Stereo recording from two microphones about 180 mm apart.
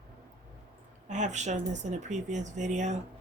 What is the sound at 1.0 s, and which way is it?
Speech, 40° right (ahead or behind).